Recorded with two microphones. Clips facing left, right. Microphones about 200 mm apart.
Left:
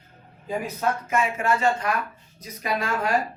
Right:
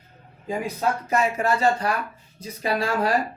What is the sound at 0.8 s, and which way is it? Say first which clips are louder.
Speech: right 2 dB; 35° right (ahead or behind).